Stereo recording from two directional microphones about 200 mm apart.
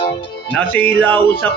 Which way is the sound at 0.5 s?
10° left (ahead or behind).